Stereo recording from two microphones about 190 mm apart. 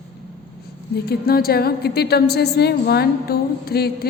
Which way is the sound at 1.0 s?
55° left (ahead or behind).